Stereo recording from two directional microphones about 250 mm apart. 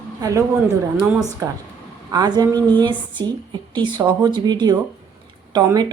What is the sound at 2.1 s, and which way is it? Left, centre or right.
A woman's voice, centre.